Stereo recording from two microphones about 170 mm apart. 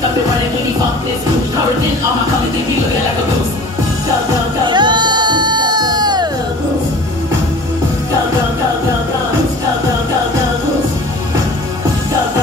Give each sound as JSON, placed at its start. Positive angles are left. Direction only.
{"t": 4.6, "sound": "music", "side_deg": -25}